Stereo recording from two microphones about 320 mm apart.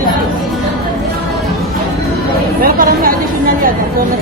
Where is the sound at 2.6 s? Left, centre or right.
Right.